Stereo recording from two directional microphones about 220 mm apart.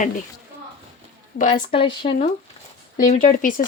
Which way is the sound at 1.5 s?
25° left (ahead or behind).